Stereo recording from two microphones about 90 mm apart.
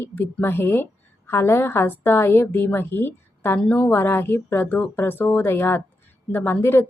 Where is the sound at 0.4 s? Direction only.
25° left (ahead or behind).